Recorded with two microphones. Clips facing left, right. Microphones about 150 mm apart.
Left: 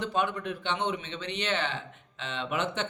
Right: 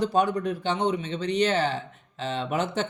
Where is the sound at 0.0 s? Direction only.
40° right (ahead or behind).